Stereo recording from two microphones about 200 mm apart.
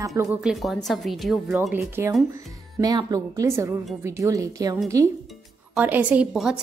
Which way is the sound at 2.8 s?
20° right (ahead or behind).